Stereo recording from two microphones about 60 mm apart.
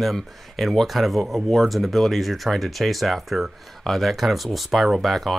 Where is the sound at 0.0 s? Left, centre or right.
Centre.